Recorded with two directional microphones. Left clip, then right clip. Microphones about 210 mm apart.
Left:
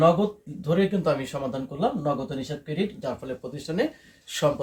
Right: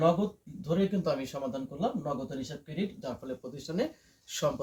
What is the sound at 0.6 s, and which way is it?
Speech, 20° left (ahead or behind).